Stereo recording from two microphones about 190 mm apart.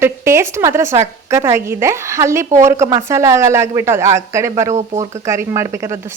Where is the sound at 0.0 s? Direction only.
15° right (ahead or behind).